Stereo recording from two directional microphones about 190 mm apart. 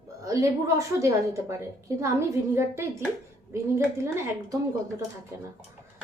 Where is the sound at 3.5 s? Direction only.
15° right (ahead or behind).